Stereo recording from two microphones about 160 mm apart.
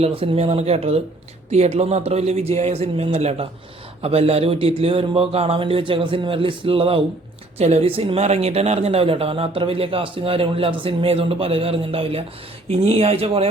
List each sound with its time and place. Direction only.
0.0 s a woman's voice: 35° right (ahead or behind)